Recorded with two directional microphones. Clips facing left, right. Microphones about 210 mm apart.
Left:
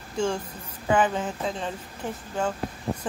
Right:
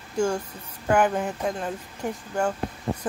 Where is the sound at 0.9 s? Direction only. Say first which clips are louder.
Right 2 dB; 10° right (ahead or behind).